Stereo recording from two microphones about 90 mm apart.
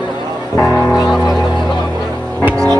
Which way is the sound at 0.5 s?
30° left (ahead or behind).